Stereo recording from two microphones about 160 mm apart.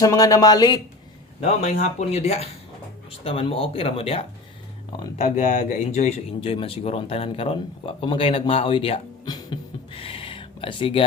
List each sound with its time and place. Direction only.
0.0 s speech: 20° left (ahead or behind)
1.4 s speech: 45° left (ahead or behind)
5.1 s speech: 45° left (ahead or behind)